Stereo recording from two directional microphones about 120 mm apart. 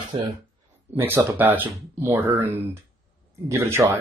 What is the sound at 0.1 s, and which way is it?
Speech, 35° right (ahead or behind).